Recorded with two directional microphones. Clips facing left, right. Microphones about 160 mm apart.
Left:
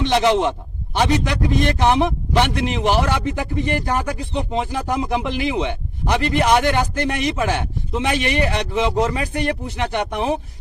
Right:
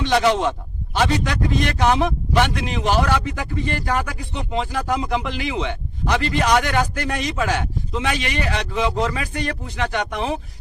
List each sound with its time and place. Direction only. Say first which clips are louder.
0.0 s a man's voice: left 1 dB; 20° left (ahead or behind)